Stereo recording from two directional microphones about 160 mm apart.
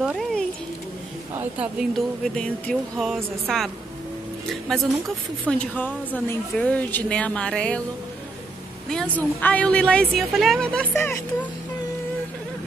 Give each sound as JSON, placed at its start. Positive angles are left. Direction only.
{"t": 0.0, "sound": "a sound", "side_deg": -10}
{"t": 1.3, "sound": "a woman's voice", "side_deg": -10}
{"t": 8.8, "sound": "a woman's voice", "side_deg": 5}